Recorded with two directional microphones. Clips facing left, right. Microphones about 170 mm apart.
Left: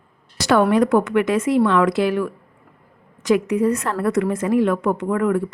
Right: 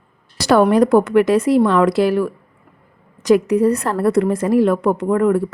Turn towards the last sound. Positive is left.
turn(degrees=-35)  # may be behind; listen again after turning